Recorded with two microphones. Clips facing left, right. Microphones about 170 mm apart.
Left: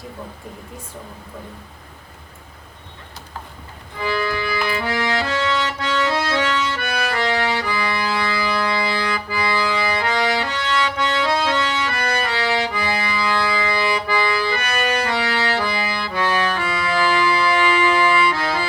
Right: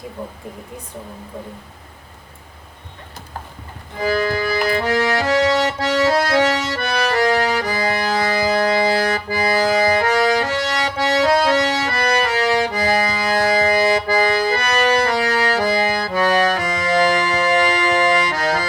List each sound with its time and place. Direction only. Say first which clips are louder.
3.9 s music: right 4 dB; 40° right (ahead or behind)